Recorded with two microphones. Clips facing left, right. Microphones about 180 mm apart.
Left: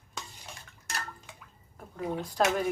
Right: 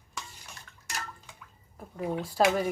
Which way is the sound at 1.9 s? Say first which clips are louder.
Right 2 dB; 10° right (ahead or behind).